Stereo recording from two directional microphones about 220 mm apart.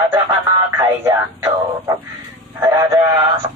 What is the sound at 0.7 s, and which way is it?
Speech, 10° right (ahead or behind).